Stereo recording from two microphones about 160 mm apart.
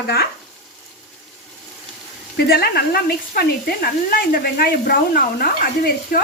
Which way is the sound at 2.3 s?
80° left.